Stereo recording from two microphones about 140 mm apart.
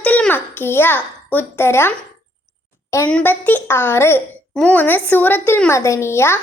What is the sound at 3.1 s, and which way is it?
A woman's voice, 10° left (ahead or behind).